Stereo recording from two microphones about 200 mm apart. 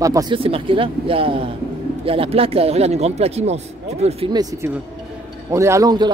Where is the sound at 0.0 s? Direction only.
20° right (ahead or behind).